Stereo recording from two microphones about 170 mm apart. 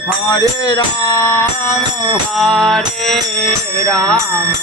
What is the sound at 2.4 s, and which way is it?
Music, centre (ahead or behind).